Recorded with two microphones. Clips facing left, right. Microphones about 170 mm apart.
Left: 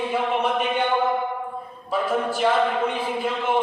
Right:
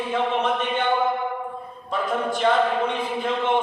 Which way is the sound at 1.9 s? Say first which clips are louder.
Left 1 dB; 5° left (ahead or behind).